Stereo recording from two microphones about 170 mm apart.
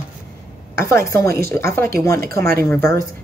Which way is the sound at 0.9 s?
15° left (ahead or behind).